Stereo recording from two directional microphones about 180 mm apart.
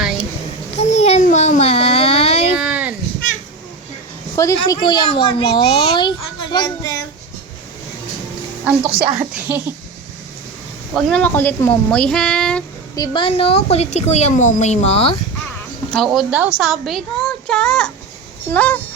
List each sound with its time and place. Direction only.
0.8 s babbling: 40° left (ahead or behind)
2.6 s a sound: 5° right (ahead or behind)
4.4 s a child's voice: 20° left (ahead or behind)
8.9 s speech: 30° right (ahead or behind)
9.5 s a sound: 10° right (ahead or behind)
10.9 s a woman's voice: 5° left (ahead or behind)
13.0 s a woman's voice: 30° left (ahead or behind)
15.9 s a woman's voice: centre (ahead or behind)